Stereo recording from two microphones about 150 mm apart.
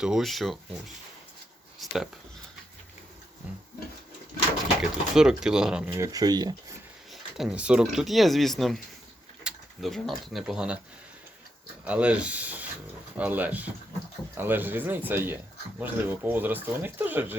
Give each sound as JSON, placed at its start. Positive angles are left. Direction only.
{"t": 0.0, "sound": "speech", "side_deg": 0}
{"t": 1.8, "sound": "speech", "side_deg": 0}
{"t": 4.8, "sound": "speech", "side_deg": -5}
{"t": 6.0, "sound": "speech", "side_deg": -25}
{"t": 7.1, "sound": "speech", "side_deg": -5}
{"t": 11.9, "sound": "speech", "side_deg": -10}